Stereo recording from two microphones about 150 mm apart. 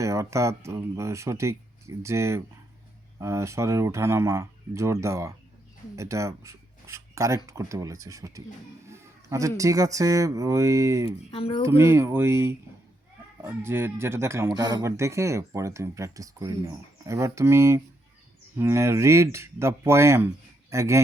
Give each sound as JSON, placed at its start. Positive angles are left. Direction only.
{"t": 0.0, "sound": "speech", "side_deg": -20}
{"t": 11.3, "sound": "speech", "side_deg": 40}
{"t": 11.8, "sound": "speech", "side_deg": -20}